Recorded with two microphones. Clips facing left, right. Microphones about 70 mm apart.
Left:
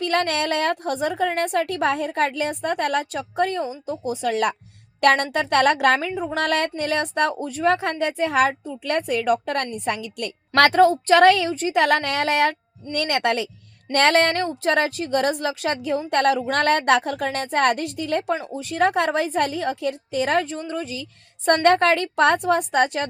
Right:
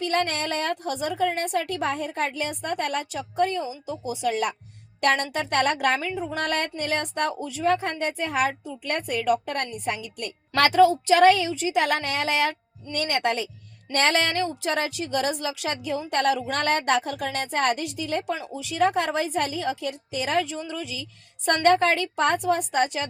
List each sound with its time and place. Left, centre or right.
0.0 s a woman's voice: left
10.7 s a woman's voice: left
18.3 s a woman's voice: left
20.4 s a woman's voice: left